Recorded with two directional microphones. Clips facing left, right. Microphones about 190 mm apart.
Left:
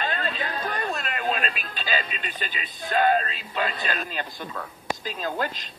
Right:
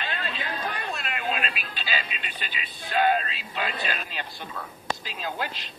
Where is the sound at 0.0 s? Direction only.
45° left (ahead or behind).